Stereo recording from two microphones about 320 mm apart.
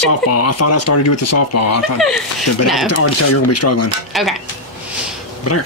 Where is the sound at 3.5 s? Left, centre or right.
Left.